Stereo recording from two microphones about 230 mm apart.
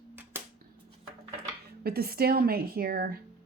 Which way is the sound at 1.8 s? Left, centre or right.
Right.